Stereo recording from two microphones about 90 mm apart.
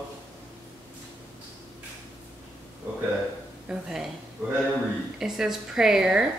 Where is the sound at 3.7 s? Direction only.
5° right (ahead or behind).